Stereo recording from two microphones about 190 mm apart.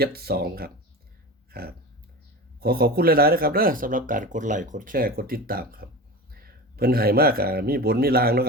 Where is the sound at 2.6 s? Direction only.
55° right (ahead or behind).